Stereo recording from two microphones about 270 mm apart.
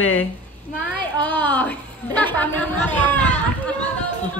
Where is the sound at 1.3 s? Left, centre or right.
Centre.